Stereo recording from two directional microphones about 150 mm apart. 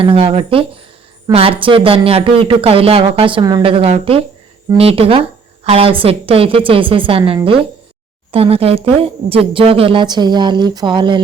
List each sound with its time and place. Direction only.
0.0 s speech: 35° right (ahead or behind)